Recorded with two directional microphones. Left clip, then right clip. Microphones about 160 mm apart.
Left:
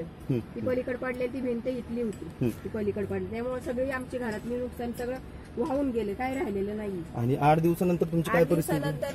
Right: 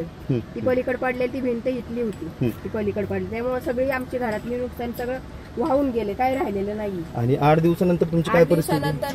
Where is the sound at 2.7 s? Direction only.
40° right (ahead or behind).